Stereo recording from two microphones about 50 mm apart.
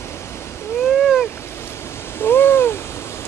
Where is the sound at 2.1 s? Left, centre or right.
Left.